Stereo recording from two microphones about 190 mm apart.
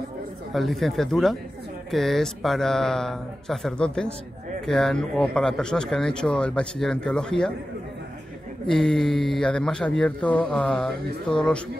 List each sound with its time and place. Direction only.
0.5 s speech: centre (ahead or behind)
8.6 s speech: 5° left (ahead or behind)